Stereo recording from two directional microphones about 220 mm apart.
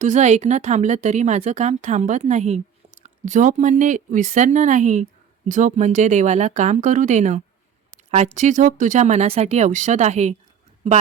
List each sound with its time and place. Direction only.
0.0 s a woman's voice: 30° right (ahead or behind)